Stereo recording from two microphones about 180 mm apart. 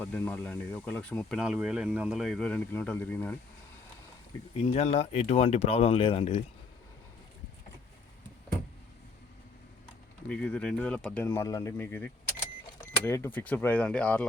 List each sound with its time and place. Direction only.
0.0 s speech: 10° left (ahead or behind)
4.5 s speech: 35° left (ahead or behind)
10.2 s speech: 5° left (ahead or behind)